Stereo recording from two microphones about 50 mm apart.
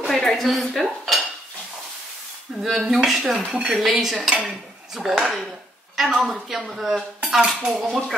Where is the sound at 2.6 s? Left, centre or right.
Centre.